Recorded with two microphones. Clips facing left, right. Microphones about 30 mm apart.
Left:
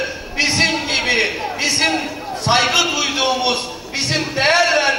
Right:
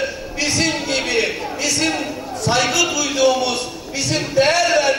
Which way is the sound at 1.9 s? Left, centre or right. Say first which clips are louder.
Left 2 dB; left.